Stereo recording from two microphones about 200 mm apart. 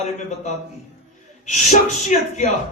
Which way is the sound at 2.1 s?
35° left (ahead or behind).